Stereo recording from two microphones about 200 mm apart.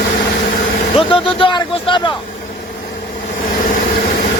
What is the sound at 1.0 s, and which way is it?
Speech, 25° left (ahead or behind).